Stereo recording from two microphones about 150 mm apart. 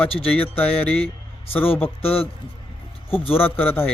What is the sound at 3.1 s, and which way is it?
Speech, 15° left (ahead or behind).